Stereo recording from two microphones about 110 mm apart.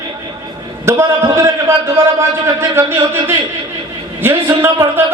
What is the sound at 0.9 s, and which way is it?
A man's voice, 25° right (ahead or behind).